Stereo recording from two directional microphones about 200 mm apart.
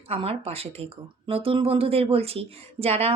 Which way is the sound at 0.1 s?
30° right (ahead or behind).